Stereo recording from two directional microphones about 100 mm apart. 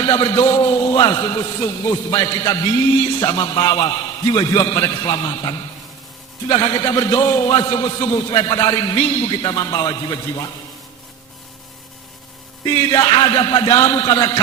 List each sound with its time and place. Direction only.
0.0 s a man's voice: 45° left (ahead or behind)
12.7 s a man's voice: 40° left (ahead or behind)